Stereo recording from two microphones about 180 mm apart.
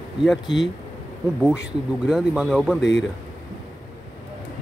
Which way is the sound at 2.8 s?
85° left.